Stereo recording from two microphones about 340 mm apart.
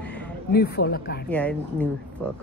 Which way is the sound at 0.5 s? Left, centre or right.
Left.